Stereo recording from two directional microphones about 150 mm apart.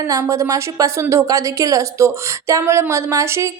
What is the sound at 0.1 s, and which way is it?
A woman's voice, 20° right (ahead or behind).